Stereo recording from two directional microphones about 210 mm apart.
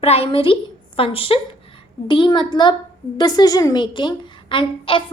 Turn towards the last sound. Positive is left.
turn(degrees=25)  # may be behind; listen again after turning